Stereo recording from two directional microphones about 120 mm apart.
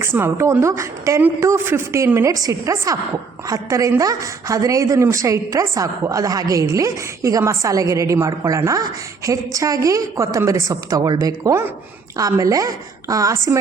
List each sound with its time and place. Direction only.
0.0 s a woman's voice: 20° right (ahead or behind)